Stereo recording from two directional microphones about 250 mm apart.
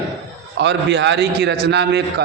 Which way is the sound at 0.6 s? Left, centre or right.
Right.